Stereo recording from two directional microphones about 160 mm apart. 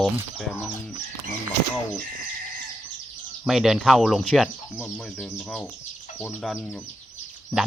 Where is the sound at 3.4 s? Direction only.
5° right (ahead or behind).